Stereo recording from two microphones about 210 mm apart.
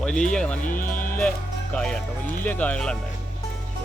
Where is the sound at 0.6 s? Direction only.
40° left (ahead or behind).